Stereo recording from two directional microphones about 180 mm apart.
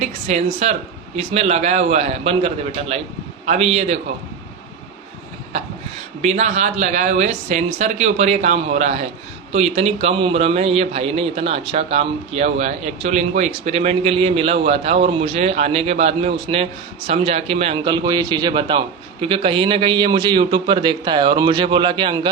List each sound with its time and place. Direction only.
0.0 s a man's voice: 40° right (ahead or behind)
6.2 s a man's voice: 40° right (ahead or behind)